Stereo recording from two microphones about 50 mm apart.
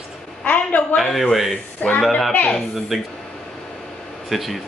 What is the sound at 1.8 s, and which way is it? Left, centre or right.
Speech, left.